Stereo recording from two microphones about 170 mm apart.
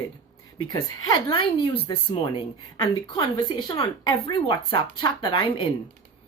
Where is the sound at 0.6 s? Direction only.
25° left (ahead or behind).